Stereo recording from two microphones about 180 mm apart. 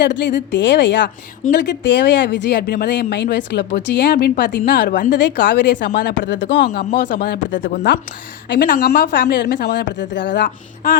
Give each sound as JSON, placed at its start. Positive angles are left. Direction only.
{"t": 0.0, "sound": "a woman's voice", "side_deg": 80}
{"t": 5.1, "sound": "speech", "side_deg": 75}
{"t": 6.7, "sound": "speech", "side_deg": 60}
{"t": 8.4, "sound": "speech", "side_deg": 55}